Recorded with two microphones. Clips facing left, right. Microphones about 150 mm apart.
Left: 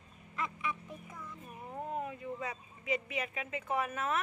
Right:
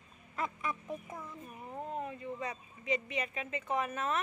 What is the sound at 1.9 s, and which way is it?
Speech, 5° left (ahead or behind).